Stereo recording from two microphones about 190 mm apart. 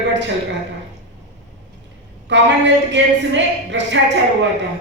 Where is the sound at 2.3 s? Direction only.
65° right (ahead or behind).